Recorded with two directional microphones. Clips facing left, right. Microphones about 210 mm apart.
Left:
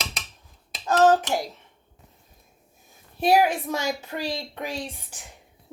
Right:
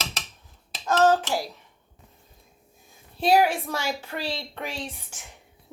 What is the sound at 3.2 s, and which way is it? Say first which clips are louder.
Speech: even; 15° left (ahead or behind).